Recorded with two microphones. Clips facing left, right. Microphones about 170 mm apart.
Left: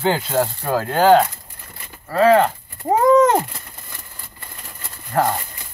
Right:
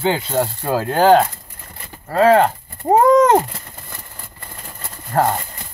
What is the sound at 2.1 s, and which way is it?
Speech, 50° right (ahead or behind).